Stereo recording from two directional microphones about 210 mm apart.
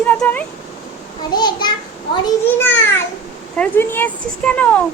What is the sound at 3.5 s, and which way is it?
Speech, 10° left (ahead or behind).